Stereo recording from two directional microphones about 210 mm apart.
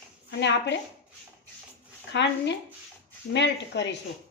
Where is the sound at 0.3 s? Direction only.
55° left (ahead or behind).